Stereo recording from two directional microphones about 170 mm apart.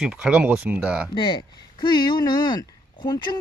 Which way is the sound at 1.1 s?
25° left (ahead or behind).